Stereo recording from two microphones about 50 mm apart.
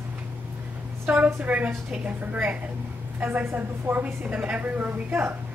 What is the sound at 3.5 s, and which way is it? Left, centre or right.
Speech, right.